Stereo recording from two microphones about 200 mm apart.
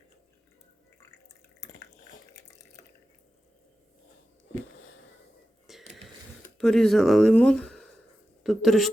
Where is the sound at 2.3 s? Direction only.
15° left (ahead or behind).